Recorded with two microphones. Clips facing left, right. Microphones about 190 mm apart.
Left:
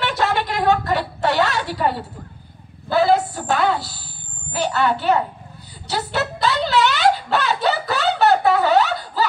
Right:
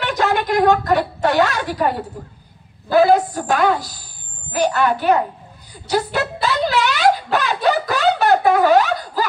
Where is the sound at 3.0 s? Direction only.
45° right (ahead or behind).